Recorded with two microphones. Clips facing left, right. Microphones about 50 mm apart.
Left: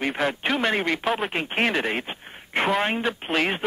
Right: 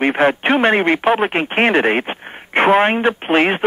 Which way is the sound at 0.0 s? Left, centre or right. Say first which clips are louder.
Right 10 dB; right.